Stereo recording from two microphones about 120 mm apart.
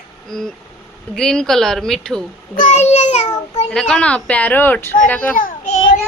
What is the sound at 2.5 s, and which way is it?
Speech, 80° left.